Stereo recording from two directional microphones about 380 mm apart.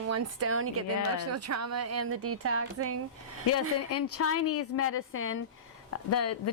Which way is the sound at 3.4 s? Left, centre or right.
Left.